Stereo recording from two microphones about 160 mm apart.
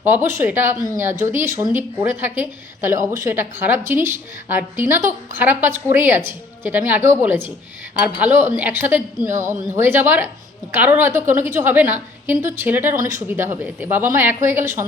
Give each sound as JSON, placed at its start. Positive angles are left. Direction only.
{"t": 0.0, "sound": "speech", "side_deg": -15}